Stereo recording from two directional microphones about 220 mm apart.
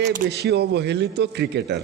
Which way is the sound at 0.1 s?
45° right (ahead or behind).